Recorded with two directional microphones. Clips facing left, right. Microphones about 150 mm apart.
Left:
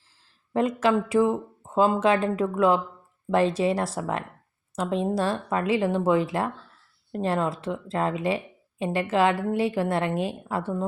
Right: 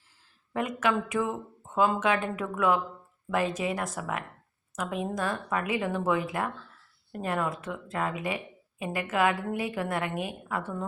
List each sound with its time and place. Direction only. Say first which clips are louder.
0.5 s a woman's voice: left 6 dB; 35° left (ahead or behind)